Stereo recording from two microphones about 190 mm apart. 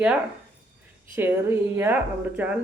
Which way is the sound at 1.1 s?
10° right (ahead or behind).